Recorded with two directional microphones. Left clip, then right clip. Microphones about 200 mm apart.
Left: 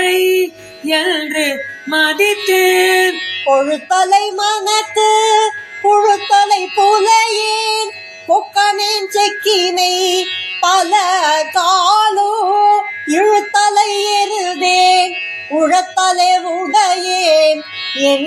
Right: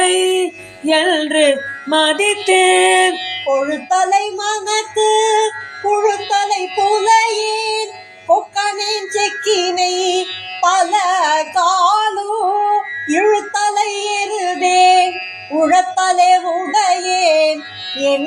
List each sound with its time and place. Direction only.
0.0 s music: 30° right (ahead or behind)
3.7 s a sound: 30° left (ahead or behind)
6.7 s music: 50° left (ahead or behind)
7.1 s music: 30° left (ahead or behind)
8.3 s child singing: 30° left (ahead or behind)
15.5 s music: 30° left (ahead or behind)